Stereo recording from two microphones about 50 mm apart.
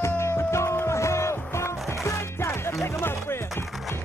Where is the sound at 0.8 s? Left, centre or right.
Left.